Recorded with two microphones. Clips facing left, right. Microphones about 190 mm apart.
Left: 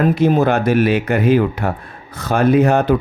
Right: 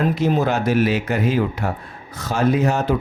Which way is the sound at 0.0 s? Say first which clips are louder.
Left 5 dB; 55° left (ahead or behind).